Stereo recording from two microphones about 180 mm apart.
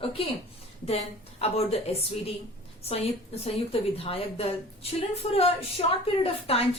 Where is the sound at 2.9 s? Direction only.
35° left (ahead or behind).